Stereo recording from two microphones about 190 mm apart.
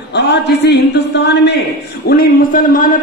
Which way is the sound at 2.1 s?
50° left (ahead or behind).